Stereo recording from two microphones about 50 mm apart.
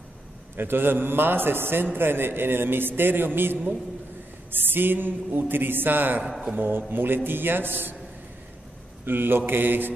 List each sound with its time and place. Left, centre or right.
0.6 s a man's voice: right
9.0 s a man's voice: right